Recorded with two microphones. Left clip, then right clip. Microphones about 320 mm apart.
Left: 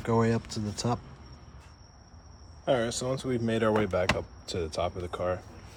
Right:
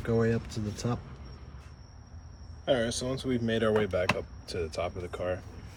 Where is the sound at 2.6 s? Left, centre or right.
Centre.